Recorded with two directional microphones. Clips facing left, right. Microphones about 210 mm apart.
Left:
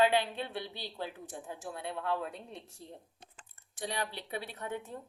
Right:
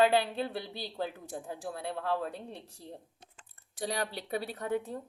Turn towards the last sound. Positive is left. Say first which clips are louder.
# right 6 dB
turn(degrees=-35)  # may be behind; listen again after turning